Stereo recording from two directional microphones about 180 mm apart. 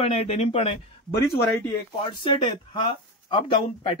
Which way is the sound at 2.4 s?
25° left (ahead or behind).